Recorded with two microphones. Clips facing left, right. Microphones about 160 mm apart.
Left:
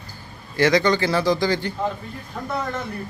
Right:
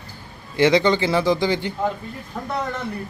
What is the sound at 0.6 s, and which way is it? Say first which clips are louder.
Speech: right 1 dB; 20° right (ahead or behind).